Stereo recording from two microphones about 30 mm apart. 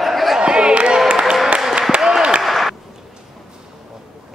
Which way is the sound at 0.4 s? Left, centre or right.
Right.